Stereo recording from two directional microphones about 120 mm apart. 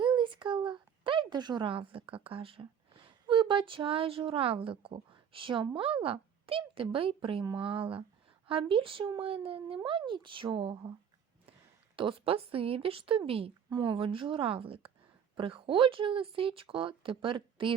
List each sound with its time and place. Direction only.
0.0 s speech: 40° right (ahead or behind)
11.9 s speech: 45° right (ahead or behind)
13.7 s speech: 40° right (ahead or behind)